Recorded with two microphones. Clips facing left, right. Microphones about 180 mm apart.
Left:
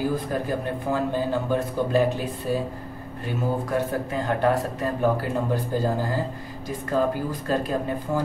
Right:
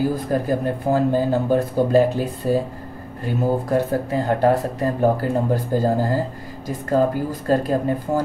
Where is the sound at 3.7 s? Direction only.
35° right (ahead or behind).